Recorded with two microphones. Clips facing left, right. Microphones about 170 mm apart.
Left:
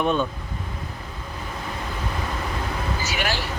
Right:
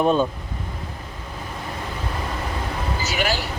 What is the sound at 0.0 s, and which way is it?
Speech, 35° right (ahead or behind).